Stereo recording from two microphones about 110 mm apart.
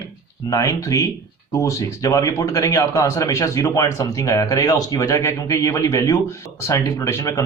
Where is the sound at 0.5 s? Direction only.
30° left (ahead or behind).